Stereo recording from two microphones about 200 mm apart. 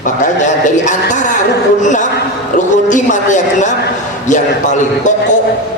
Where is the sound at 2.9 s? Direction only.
40° left (ahead or behind).